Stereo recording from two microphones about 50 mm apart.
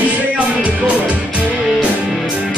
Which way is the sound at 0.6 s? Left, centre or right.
Right.